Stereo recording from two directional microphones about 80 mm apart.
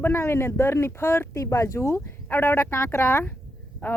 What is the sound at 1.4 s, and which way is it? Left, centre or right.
Speech, left.